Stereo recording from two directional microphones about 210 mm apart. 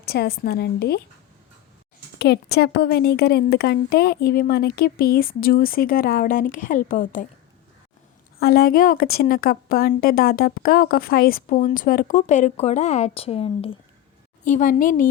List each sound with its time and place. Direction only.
0.0 s a woman's voice: 50° left (ahead or behind)
2.1 s a woman's voice: 50° left (ahead or behind)
8.4 s a woman's voice: 45° left (ahead or behind); by 13.7 s 25° left (ahead or behind)
14.4 s a woman's voice: 40° left (ahead or behind)